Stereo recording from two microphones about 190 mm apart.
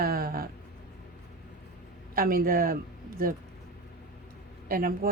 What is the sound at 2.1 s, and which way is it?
Speech, 50° right (ahead or behind).